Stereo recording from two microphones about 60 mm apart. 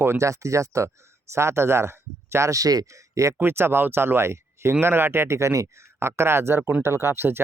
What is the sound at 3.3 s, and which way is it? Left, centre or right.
Speech, right.